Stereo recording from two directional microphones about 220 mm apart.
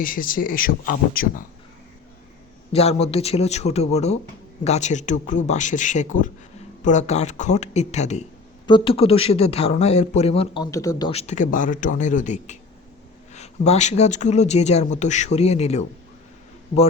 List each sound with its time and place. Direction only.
0.0 s speech: 40° left (ahead or behind)
2.7 s speech: 30° left (ahead or behind)
11.1 s speech: 30° left (ahead or behind)